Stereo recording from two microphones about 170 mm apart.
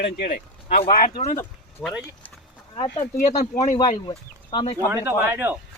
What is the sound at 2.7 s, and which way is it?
Speech, 25° left (ahead or behind).